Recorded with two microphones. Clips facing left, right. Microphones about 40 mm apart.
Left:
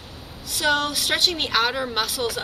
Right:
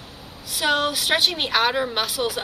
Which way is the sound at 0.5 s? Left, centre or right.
Centre.